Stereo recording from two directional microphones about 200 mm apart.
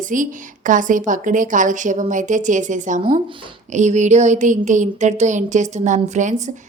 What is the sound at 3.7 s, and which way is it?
A woman's voice, 35° right (ahead or behind).